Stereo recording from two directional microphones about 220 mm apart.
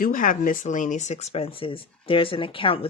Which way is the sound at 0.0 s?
40° left (ahead or behind).